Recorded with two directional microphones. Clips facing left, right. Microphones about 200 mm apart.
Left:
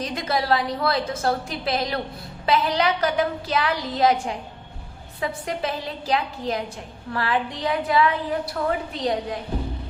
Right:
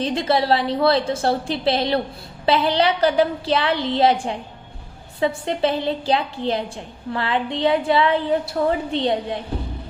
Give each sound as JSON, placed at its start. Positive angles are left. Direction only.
{"t": 0.0, "sound": "a woman's voice", "side_deg": -30}